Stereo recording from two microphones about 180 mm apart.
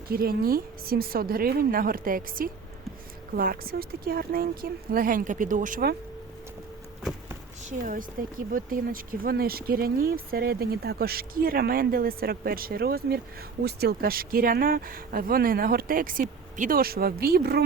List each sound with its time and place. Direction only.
0.1 s speech: 55° right (ahead or behind)
7.7 s speech: 50° right (ahead or behind)